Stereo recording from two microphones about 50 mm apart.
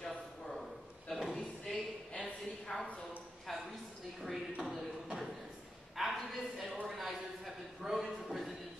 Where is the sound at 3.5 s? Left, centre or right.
Centre.